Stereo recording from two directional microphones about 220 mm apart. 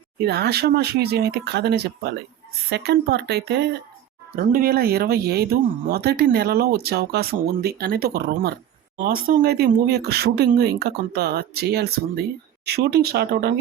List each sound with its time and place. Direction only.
0.2 s speech: 50° right (ahead or behind)